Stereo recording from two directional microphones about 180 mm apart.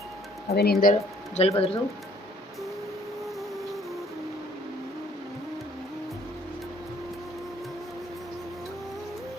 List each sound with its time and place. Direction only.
0.5 s speech: 60° left (ahead or behind)
0.9 s speech: 35° left (ahead or behind)